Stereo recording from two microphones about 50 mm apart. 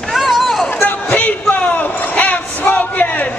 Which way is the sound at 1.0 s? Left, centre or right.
Left.